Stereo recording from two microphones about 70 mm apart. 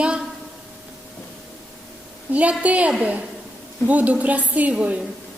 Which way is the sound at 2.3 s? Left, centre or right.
Right.